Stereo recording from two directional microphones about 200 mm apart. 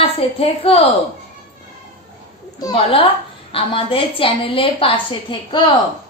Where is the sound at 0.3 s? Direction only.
30° left (ahead or behind).